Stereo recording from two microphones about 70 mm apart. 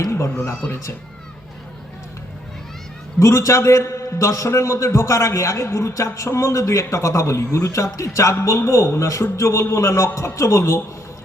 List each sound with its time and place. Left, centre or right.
3.2 s a man's voice: left